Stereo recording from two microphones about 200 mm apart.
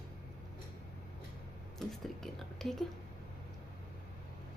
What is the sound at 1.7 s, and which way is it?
A woman's voice, centre (ahead or behind).